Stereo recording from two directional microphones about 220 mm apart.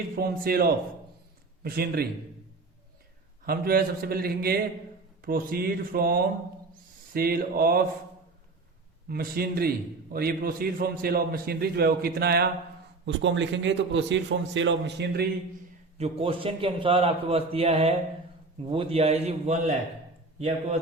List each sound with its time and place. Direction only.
0.2 s a man's voice: 45° right (ahead or behind)
3.4 s a man's voice: 45° right (ahead or behind)
9.0 s a man's voice: 45° right (ahead or behind)
13.1 s a man's voice: 55° right (ahead or behind)
16.0 s a man's voice: 25° right (ahead or behind)